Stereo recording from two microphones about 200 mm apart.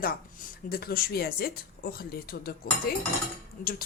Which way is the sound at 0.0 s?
50° left (ahead or behind).